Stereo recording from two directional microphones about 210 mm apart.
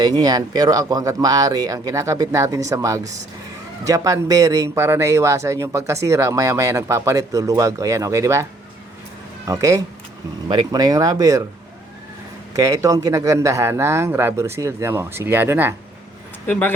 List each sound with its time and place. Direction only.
0.2 s speech: 20° right (ahead or behind)
9.5 s speech: 15° right (ahead or behind)
12.5 s speech: 15° right (ahead or behind)
16.5 s speech: 5° left (ahead or behind)